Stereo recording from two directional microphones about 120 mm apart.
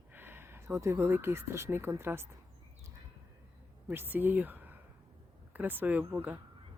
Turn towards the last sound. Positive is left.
turn(degrees=-15)  # may be behind; listen again after turning